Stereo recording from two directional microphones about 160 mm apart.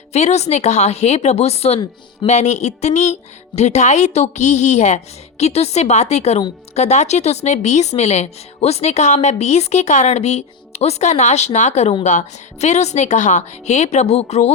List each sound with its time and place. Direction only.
0.1 s speech: 45° left (ahead or behind)